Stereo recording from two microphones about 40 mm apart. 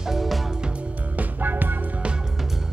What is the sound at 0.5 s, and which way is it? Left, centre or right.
Music, right.